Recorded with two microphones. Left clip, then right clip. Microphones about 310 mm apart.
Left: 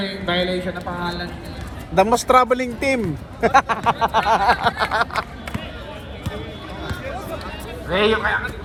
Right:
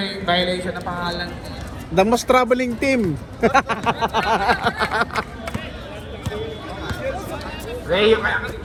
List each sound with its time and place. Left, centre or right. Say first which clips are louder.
0.0 s a man's voice: right 2 dB; centre
2.0 s a sound: left 1 dB; left
7.9 s speech: right 2 dB; centre